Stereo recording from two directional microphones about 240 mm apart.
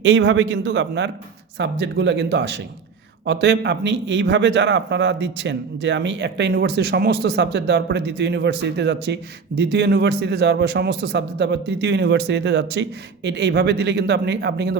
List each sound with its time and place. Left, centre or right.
0.0 s a man's voice: right